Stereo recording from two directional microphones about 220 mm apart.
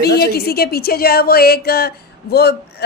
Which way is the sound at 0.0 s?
45° left (ahead or behind).